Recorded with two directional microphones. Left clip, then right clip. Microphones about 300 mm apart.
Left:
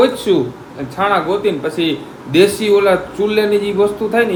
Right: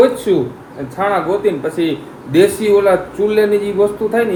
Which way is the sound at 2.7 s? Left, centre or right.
Centre.